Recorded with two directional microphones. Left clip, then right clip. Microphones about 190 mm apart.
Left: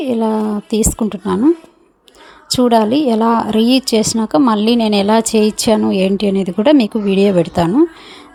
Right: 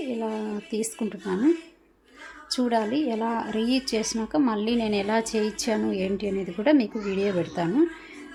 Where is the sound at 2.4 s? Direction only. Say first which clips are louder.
Left 13 dB; 40° left (ahead or behind).